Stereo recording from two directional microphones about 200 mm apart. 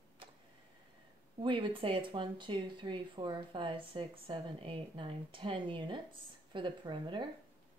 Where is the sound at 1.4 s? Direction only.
25° right (ahead or behind).